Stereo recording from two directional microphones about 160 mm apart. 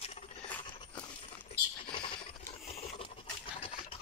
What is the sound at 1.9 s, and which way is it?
Rodents, 30° left (ahead or behind).